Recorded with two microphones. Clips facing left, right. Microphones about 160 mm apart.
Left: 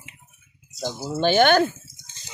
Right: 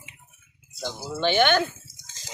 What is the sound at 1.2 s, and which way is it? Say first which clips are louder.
Speech: left 4 dB; 40° left (ahead or behind).